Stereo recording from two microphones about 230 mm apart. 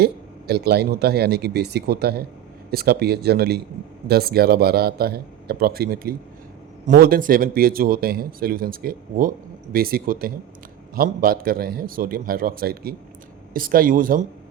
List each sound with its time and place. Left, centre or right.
0.0 s a man's voice: right